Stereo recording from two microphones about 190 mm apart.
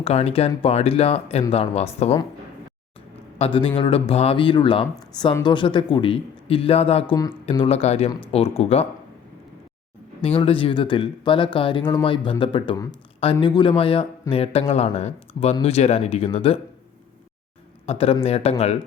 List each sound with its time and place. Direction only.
0.0 s speech: 35° left (ahead or behind)
3.3 s speech: 30° left (ahead or behind)
10.2 s speech: 30° left (ahead or behind)
17.8 s speech: 30° left (ahead or behind)